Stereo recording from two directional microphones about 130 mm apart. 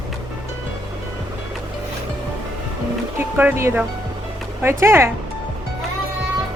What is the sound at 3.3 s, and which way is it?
Speech, 15° right (ahead or behind).